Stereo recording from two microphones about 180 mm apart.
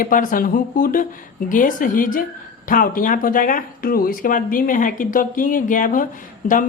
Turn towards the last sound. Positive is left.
turn(degrees=45)  # may be behind; listen again after turning